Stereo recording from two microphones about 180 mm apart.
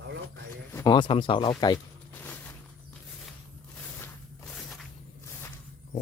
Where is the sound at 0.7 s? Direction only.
15° left (ahead or behind).